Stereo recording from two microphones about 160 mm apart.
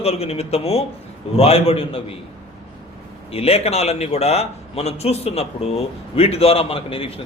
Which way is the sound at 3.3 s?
40° left (ahead or behind).